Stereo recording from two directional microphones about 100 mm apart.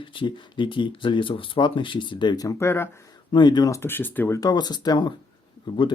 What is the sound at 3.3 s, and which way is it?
Speech, 45° left (ahead or behind).